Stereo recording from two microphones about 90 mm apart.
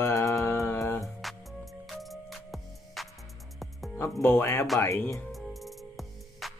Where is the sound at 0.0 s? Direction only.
35° left (ahead or behind).